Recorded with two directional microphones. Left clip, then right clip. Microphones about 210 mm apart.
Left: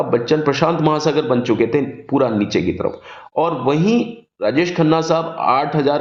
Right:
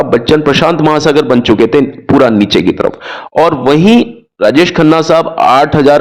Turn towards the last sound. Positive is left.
turn(degrees=-30)  # may be behind; listen again after turning